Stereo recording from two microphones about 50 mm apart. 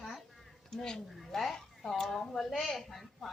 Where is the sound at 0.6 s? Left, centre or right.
Centre.